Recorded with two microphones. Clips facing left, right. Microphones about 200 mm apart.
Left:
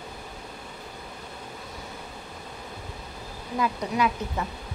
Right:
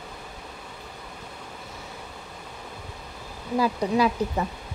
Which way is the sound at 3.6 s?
35° right (ahead or behind).